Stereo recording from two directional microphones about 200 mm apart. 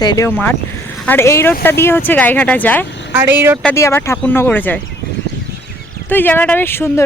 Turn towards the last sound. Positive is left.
turn(degrees=10)  # may be behind; listen again after turning